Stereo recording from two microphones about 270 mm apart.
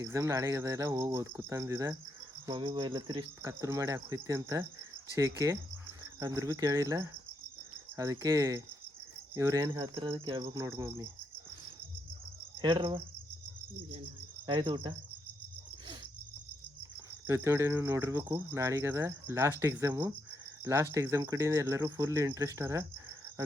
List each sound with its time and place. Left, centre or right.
0.0 s cricket: centre
6.0 s cricket: centre
12.6 s cricket: centre
14.4 s cricket: centre
17.2 s cricket: centre